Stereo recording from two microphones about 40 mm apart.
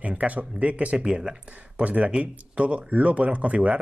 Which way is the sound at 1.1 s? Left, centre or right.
Centre.